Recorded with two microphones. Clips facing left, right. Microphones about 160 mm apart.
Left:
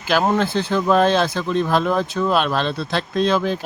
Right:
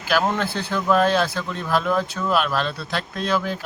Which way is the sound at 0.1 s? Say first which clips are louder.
Left 4 dB; 20° left (ahead or behind).